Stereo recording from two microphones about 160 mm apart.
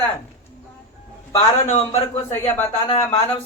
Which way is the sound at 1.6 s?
45° left (ahead or behind).